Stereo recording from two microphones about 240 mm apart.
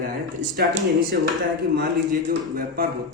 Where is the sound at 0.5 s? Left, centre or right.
Right.